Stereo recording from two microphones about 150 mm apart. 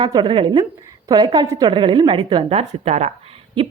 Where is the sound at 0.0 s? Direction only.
30° right (ahead or behind).